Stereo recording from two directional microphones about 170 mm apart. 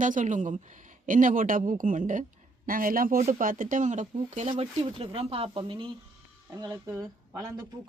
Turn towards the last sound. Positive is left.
turn(degrees=-15)  # may be behind; listen again after turning